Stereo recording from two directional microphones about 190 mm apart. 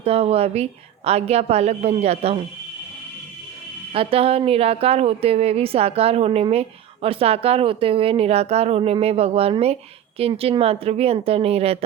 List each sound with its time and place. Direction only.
0.0 s a woman's voice: 30° right (ahead or behind)
3.9 s a woman's voice: 30° right (ahead or behind)